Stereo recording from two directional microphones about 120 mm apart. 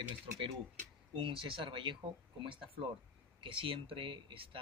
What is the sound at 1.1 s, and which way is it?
Speech, 45° right (ahead or behind).